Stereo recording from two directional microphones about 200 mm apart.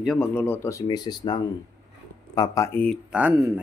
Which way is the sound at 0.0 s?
Centre (ahead or behind).